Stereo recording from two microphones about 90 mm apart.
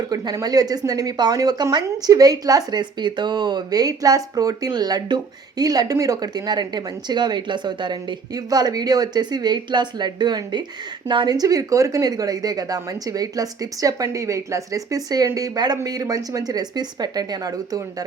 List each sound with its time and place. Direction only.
0.1 s speech: 45° right (ahead or behind)
8.4 s a woman's voice: 45° right (ahead or behind)